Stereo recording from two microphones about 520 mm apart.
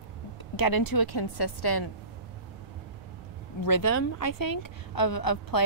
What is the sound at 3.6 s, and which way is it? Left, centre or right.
A woman's voice, left.